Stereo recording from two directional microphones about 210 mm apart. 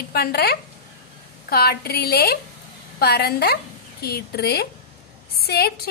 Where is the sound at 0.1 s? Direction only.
50° left (ahead or behind).